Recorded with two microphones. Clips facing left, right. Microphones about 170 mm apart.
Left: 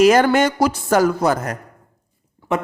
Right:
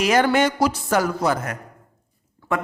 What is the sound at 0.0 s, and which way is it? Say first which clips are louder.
Speech: left 5 dB; 45° left (ahead or behind).